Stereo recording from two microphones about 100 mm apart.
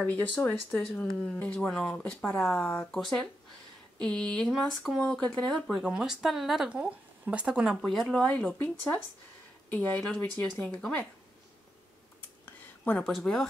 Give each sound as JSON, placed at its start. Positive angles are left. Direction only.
{"t": 0.0, "sound": "speech", "side_deg": 15}
{"t": 6.8, "sound": "speech", "side_deg": -15}
{"t": 7.8, "sound": "speech", "side_deg": 0}
{"t": 8.1, "sound": "speech", "side_deg": 10}
{"t": 12.4, "sound": "a sound", "side_deg": 15}
{"t": 13.2, "sound": "speech", "side_deg": 5}